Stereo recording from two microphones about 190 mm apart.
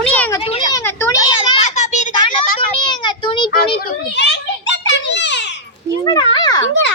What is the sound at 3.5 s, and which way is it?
Children playing, 50° left (ahead or behind).